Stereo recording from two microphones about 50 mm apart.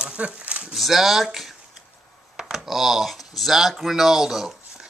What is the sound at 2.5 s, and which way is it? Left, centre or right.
A man's voice, centre.